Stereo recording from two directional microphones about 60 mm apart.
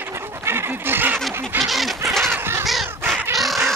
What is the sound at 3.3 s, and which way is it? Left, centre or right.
Duck, centre.